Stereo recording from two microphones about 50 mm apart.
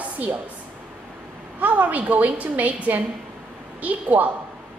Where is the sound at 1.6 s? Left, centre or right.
Right.